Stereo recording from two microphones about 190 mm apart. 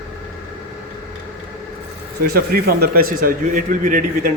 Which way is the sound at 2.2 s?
55° right (ahead or behind).